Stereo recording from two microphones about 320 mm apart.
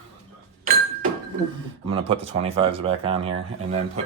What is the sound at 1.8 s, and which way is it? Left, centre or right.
Speech, centre.